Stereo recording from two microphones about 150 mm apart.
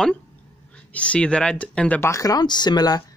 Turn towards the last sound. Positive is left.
turn(degrees=25)  # may be behind; listen again after turning